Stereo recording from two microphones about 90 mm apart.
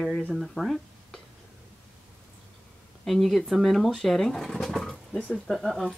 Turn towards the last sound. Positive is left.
turn(degrees=0)  # may be behind; listen again after turning